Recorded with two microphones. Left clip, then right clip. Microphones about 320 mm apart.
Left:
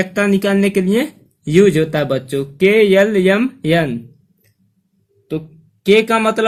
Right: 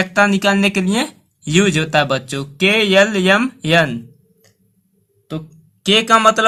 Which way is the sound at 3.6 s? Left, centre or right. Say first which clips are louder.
Right 1 dB; right.